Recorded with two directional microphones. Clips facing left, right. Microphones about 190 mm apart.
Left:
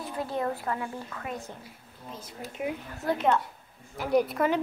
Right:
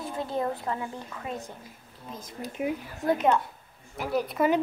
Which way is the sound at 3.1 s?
20° right (ahead or behind).